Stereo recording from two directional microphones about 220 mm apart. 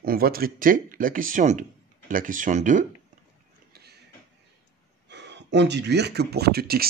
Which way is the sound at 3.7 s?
45° right (ahead or behind).